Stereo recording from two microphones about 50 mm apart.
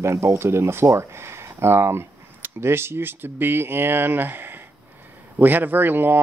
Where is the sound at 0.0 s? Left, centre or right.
Right.